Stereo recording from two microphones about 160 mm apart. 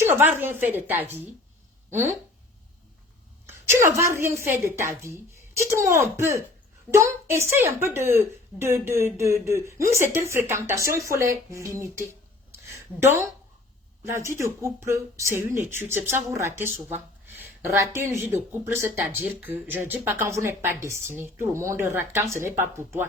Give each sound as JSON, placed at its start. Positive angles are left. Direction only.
{"t": 0.0, "sound": "speech", "side_deg": -15}
{"t": 3.4, "sound": "speech", "side_deg": -15}
{"t": 12.5, "sound": "a sound", "side_deg": -15}
{"t": 14.3, "sound": "speech", "side_deg": -15}